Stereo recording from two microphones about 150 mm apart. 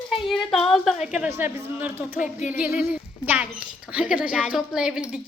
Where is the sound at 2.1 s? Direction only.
55° left (ahead or behind).